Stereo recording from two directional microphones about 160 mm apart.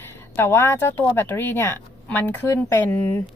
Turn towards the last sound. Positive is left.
turn(degrees=15)  # may be behind; listen again after turning